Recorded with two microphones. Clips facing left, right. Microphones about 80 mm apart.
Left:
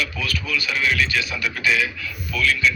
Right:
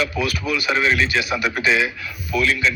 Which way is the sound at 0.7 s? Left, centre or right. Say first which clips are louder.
Right 3 dB; right.